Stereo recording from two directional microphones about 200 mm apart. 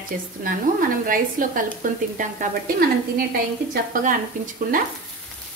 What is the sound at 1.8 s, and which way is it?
Speech, 40° right (ahead or behind).